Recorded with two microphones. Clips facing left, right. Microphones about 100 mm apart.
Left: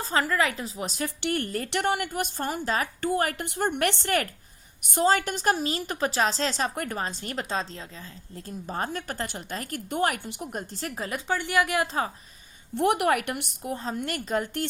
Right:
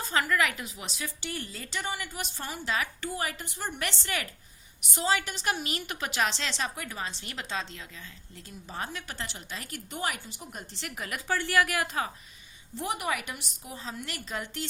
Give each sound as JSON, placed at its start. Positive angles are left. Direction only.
{"t": 0.0, "sound": "a woman's voice", "side_deg": 35}
{"t": 0.9, "sound": "a woman's voice", "side_deg": 50}
{"t": 12.7, "sound": "a woman's voice", "side_deg": 65}